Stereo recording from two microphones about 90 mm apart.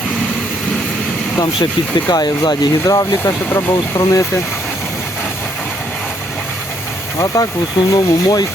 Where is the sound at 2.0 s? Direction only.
50° left (ahead or behind).